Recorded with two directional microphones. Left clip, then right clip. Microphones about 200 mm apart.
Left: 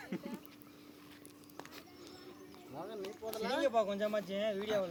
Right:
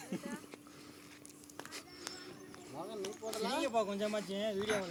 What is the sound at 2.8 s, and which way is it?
Speech, 5° left (ahead or behind).